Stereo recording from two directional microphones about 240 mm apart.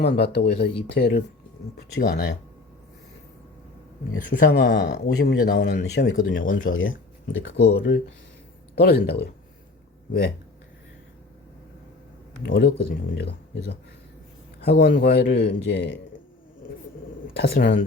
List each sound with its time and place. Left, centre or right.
0.2 s speech: left
4.4 s speech: left
6.3 s speech: left
6.7 s speech: left
12.4 s speech: left
17.3 s speech: left